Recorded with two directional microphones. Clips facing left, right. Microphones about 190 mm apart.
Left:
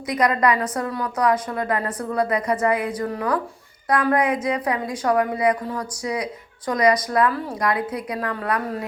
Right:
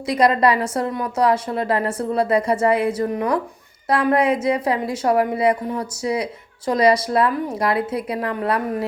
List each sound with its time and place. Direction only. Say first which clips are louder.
0.1 s a woman's voice: right 3 dB; 30° right (ahead or behind)